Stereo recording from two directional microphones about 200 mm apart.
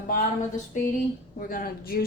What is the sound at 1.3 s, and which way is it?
Speech, 45° left (ahead or behind).